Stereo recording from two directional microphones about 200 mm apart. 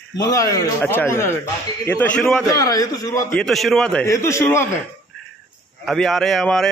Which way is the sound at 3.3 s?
Centre (ahead or behind).